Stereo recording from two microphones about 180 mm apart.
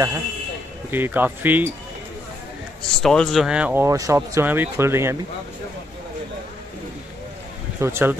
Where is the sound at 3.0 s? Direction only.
Centre (ahead or behind); by 5.2 s 15° right (ahead or behind).